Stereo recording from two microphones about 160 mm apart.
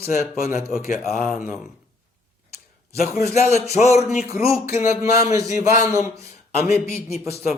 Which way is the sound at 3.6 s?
20° right (ahead or behind).